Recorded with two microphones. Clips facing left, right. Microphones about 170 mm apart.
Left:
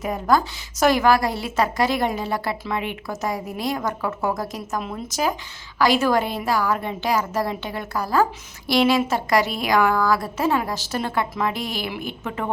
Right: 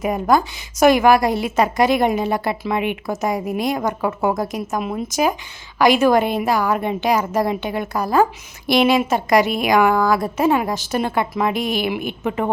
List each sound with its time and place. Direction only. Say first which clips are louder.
0.0 s a woman's voice: right 3 dB; 15° right (ahead or behind)